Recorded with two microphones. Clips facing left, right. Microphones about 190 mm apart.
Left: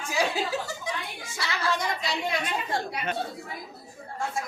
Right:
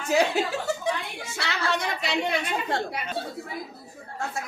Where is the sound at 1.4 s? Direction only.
65° right (ahead or behind).